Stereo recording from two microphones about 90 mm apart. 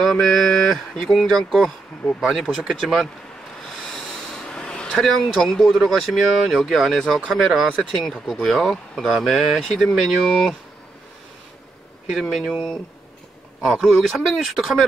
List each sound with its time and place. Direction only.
0.0 s speech: centre (ahead or behind)
4.3 s a sound: 10° left (ahead or behind)
4.9 s speech: centre (ahead or behind)
12.1 s speech: centre (ahead or behind)